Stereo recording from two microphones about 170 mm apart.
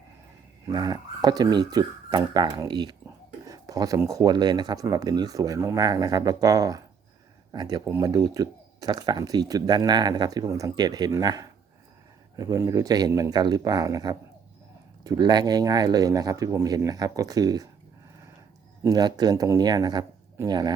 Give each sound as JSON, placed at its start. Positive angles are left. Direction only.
{"t": 0.7, "sound": "speech", "side_deg": -25}
{"t": 18.8, "sound": "speech", "side_deg": -20}